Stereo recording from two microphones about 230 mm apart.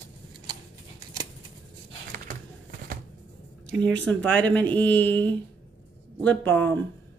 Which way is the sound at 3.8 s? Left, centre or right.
Centre.